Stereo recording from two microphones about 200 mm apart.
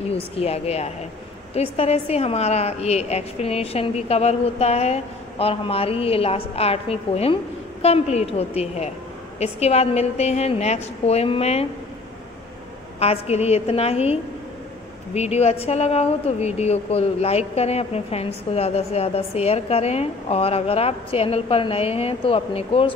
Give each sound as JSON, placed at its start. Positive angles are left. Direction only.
{"t": 0.1, "sound": "speech", "side_deg": 30}
{"t": 13.0, "sound": "speech", "side_deg": 30}
{"t": 15.1, "sound": "speech", "side_deg": 30}